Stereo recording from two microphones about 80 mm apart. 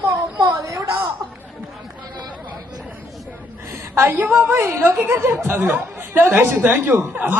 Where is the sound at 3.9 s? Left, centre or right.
Right.